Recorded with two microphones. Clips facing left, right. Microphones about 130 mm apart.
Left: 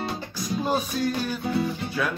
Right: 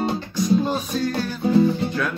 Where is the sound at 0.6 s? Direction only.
15° left (ahead or behind).